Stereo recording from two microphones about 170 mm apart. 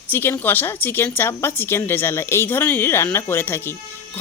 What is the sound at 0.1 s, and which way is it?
Speech, 10° left (ahead or behind).